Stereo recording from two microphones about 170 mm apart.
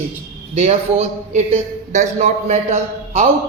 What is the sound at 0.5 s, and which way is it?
A man's voice, 40° right (ahead or behind).